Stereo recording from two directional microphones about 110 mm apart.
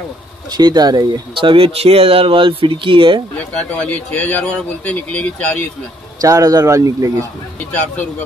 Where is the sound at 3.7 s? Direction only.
15° left (ahead or behind).